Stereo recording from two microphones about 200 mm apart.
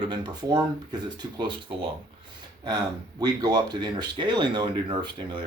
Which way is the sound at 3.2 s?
20° right (ahead or behind).